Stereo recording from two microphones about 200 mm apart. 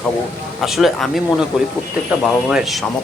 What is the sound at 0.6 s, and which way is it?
Speech, centre (ahead or behind).